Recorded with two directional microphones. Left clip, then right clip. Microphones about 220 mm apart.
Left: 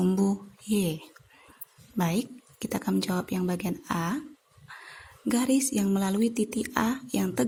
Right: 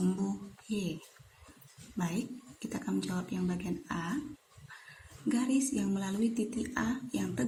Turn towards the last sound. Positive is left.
turn(degrees=45)  # may be behind; listen again after turning